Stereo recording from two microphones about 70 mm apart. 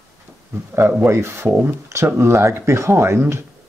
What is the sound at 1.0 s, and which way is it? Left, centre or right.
Speech, right.